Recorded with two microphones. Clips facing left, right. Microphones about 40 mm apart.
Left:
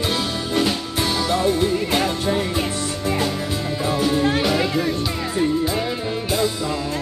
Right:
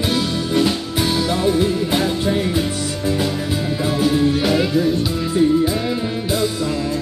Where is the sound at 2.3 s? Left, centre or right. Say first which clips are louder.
Right 2 dB; centre.